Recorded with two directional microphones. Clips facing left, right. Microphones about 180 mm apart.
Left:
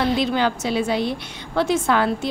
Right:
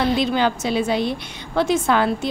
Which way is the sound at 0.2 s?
20° right (ahead or behind).